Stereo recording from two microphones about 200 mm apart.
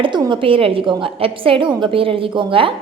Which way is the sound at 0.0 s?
25° right (ahead or behind).